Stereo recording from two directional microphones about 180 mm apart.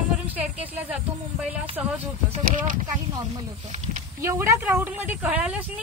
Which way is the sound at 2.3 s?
35° right (ahead or behind).